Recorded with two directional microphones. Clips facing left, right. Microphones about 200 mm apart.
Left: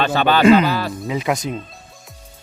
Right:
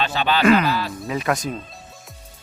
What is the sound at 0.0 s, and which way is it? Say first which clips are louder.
Speech: left 5 dB; 55° left (ahead or behind).